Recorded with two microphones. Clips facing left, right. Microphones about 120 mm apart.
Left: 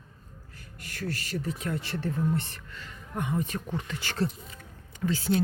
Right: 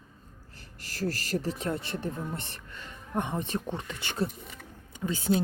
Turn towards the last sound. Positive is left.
turn(degrees=-20)  # may be behind; listen again after turning